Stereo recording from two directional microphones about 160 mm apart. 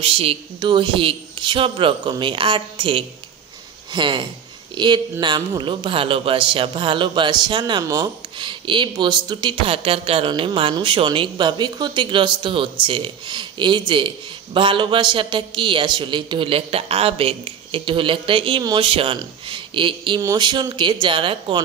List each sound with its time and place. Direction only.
0.0 s a man's voice: 35° right (ahead or behind)